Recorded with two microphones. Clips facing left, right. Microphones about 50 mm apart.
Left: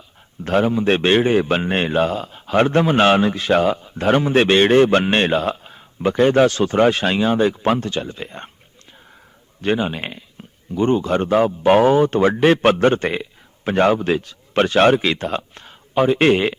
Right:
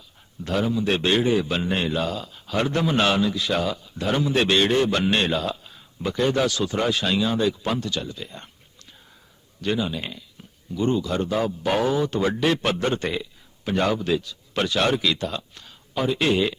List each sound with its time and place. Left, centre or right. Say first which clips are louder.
0.4 s a man's voice: left 6 dB; left
9.6 s a man's voice: left 5 dB; left